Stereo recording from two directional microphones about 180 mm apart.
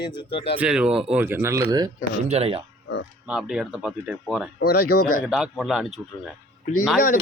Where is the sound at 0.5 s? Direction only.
5° right (ahead or behind); by 1.9 s 20° right (ahead or behind).